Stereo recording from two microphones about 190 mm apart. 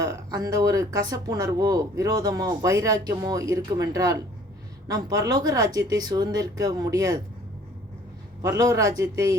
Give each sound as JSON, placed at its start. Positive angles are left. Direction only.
{"t": 0.0, "sound": "speech", "side_deg": -20}
{"t": 8.4, "sound": "speech", "side_deg": -15}